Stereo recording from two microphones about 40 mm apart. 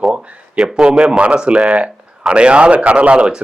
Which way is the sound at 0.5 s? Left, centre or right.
Centre.